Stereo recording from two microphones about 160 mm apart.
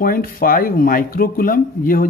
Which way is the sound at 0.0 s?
65° left (ahead or behind).